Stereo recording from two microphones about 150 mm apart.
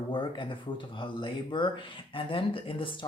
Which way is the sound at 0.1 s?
30° left (ahead or behind).